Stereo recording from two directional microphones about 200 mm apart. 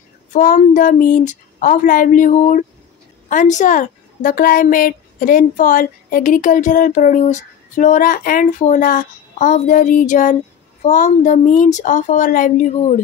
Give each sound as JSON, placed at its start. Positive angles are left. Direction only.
{"t": 0.3, "sound": "a woman's voice", "side_deg": 40}